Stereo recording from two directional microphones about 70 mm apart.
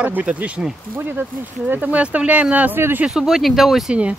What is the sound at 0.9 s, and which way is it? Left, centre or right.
Speech, right.